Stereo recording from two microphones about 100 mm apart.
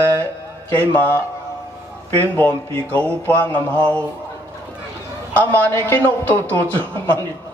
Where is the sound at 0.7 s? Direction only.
15° left (ahead or behind).